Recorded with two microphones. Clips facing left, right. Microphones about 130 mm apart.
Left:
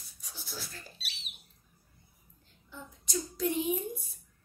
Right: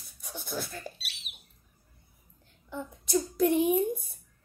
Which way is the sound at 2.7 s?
55° right (ahead or behind).